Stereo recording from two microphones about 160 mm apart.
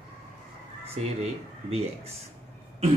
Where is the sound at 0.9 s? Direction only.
40° right (ahead or behind).